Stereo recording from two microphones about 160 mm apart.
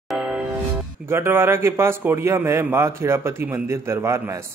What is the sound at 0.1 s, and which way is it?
Music, 5° right (ahead or behind).